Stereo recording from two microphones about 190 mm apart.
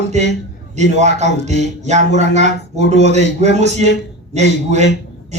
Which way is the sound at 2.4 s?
65° left (ahead or behind).